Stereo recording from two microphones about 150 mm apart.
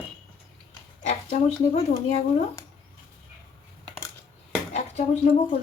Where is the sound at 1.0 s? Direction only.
50° left (ahead or behind).